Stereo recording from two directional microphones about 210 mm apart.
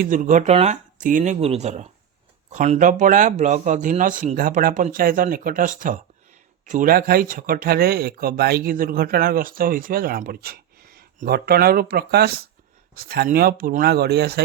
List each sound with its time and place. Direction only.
0.0 s speech: 40° right (ahead or behind)